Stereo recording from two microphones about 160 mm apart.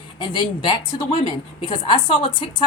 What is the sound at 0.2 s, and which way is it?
A woman's voice, 30° left (ahead or behind).